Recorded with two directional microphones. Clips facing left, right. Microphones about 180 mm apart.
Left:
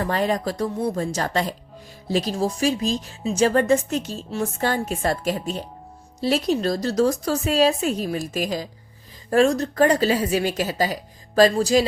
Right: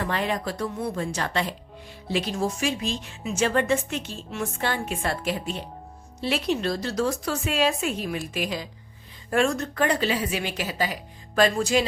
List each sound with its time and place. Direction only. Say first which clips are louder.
0.0 s speech: left 4 dB; 40° left (ahead or behind)